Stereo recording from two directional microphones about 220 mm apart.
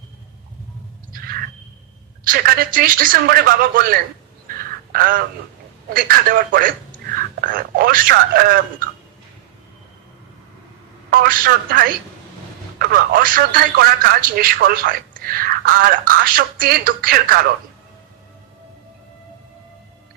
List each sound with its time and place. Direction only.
1.1 s a sound: 40° right (ahead or behind)
2.2 s speech: 40° right (ahead or behind)
11.1 s speech: 40° right (ahead or behind)